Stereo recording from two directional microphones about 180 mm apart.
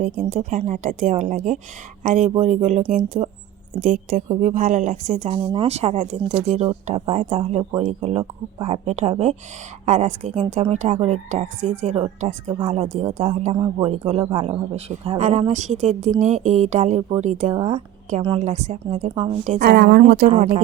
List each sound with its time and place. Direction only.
0.0 s a woman's voice: 40° right (ahead or behind)
17.5 s a woman's voice: 25° right (ahead or behind)
19.6 s speech: 65° right (ahead or behind)
20.3 s a woman's voice: 35° right (ahead or behind)